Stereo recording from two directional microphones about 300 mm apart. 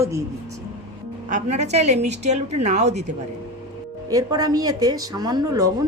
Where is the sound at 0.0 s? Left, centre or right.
Centre.